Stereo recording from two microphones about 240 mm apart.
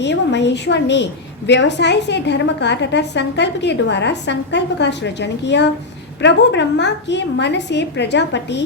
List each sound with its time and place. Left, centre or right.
0.0 s a woman's voice: left